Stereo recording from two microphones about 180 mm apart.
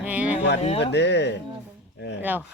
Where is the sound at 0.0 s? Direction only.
10° right (ahead or behind).